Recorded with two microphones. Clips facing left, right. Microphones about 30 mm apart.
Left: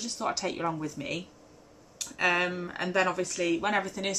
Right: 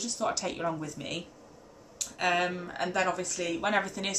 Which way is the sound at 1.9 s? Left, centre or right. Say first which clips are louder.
Left 1 dB; centre.